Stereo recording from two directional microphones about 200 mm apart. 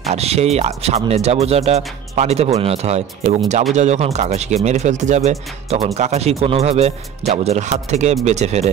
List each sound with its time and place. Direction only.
0.1 s speech: 30° right (ahead or behind)